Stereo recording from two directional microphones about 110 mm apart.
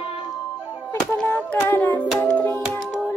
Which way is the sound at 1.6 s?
15° left (ahead or behind).